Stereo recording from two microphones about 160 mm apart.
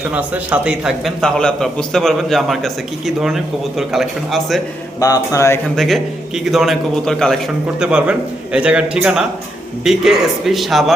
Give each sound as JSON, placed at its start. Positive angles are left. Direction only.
{"t": 0.1, "sound": "a man's voice", "side_deg": -10}
{"t": 4.9, "sound": "mantra", "side_deg": 20}
{"t": 5.6, "sound": "a man's voice", "side_deg": 0}